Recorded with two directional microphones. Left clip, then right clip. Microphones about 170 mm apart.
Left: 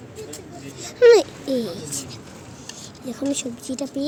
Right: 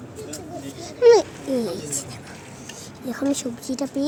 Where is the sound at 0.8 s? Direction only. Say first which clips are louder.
Left 1 dB; 45° left (ahead or behind).